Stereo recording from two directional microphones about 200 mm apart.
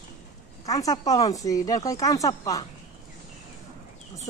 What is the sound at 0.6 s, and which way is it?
Speech, 15° left (ahead or behind).